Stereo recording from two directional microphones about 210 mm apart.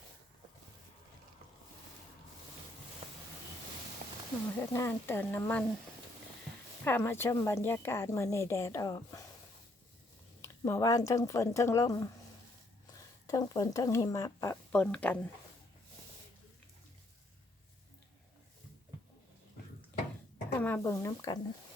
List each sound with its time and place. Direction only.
4.6 s speech: 10° left (ahead or behind)
6.8 s speech: 10° left (ahead or behind)
10.4 s speech: 15° left (ahead or behind)
13.2 s speech: 15° left (ahead or behind)
20.6 s speech: 10° left (ahead or behind)